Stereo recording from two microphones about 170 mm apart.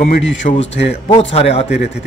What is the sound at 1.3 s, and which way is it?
Speech, 40° left (ahead or behind).